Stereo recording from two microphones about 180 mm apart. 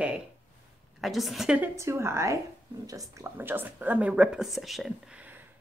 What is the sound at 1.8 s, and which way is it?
Speech, 15° right (ahead or behind).